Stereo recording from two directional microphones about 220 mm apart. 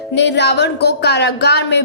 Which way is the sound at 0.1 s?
50° left (ahead or behind).